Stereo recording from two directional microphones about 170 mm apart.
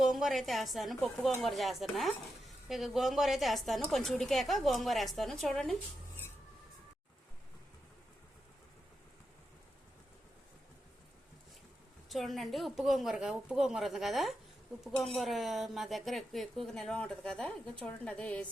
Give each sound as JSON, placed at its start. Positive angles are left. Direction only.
{"t": 0.0, "sound": "speech", "side_deg": 0}
{"t": 12.0, "sound": "speech", "side_deg": 0}